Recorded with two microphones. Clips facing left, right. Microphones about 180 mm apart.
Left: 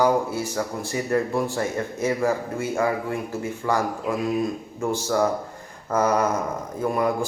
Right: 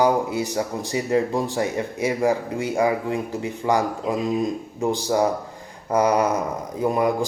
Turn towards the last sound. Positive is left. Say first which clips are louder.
# right 2 dB
turn(degrees=-15)  # may be behind; listen again after turning